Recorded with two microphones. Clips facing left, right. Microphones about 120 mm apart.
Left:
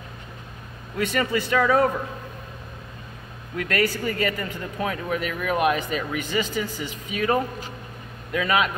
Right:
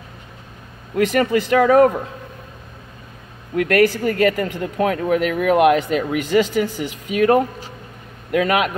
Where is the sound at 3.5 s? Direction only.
60° right (ahead or behind).